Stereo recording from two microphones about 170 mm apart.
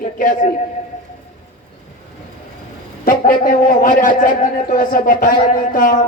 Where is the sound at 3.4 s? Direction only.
55° left (ahead or behind).